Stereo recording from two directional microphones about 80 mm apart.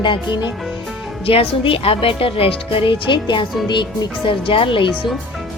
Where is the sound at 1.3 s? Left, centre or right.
Left.